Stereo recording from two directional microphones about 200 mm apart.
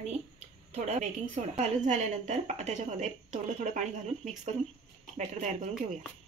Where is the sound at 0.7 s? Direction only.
35° right (ahead or behind).